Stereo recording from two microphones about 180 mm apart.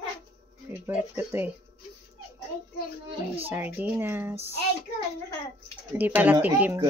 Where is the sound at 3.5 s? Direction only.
10° right (ahead or behind).